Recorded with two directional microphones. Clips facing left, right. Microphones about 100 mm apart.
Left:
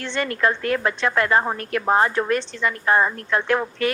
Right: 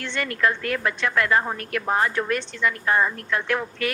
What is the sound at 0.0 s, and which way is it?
A woman's voice, 30° left (ahead or behind).